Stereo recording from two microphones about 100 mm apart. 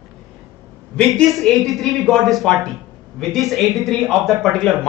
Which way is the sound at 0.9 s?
5° left (ahead or behind).